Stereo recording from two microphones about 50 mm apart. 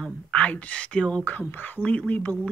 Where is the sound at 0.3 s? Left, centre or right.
Left.